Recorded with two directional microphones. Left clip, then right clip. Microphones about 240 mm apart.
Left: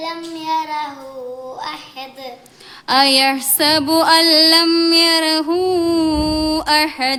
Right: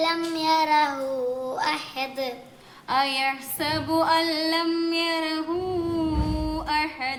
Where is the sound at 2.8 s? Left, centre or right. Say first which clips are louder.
Left 10 dB; left.